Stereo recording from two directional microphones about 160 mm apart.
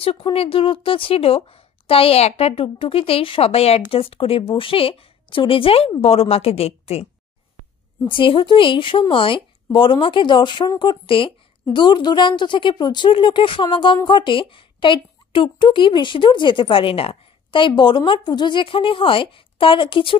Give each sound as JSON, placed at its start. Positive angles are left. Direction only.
{"t": 0.0, "sound": "a woman's voice", "side_deg": 35}
{"t": 8.1, "sound": "a woman's voice", "side_deg": 35}